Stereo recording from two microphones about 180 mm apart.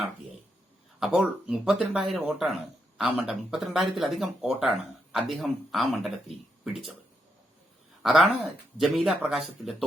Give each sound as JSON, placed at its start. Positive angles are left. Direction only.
{"t": 0.9, "sound": "speech", "side_deg": -5}
{"t": 8.0, "sound": "speech", "side_deg": 0}